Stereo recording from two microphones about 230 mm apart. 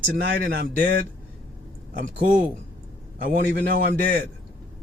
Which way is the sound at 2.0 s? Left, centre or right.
Right.